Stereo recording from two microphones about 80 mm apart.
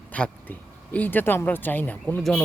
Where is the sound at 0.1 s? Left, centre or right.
Centre.